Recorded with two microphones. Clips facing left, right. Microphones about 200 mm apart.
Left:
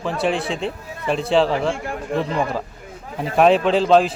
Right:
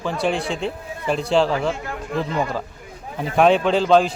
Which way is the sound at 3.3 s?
Centre (ahead or behind).